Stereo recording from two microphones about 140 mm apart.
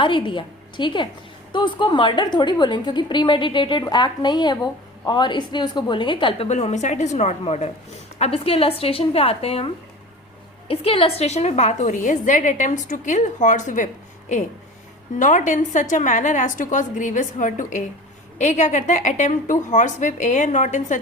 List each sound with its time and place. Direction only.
0.0 s a woman's voice: 35° left (ahead or behind)
6.5 s a woman's voice: 55° left (ahead or behind)
10.7 s a woman's voice: 40° left (ahead or behind); by 21.0 s 60° left (ahead or behind)